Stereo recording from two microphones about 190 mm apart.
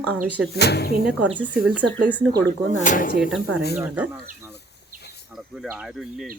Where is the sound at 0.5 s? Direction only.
60° left (ahead or behind).